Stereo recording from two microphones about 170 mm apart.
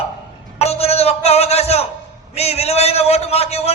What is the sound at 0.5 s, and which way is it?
A man's voice, 40° left (ahead or behind).